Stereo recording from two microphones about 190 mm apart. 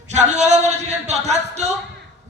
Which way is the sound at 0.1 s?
35° right (ahead or behind).